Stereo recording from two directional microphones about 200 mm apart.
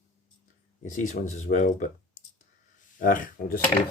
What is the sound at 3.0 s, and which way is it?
Speech, 40° left (ahead or behind).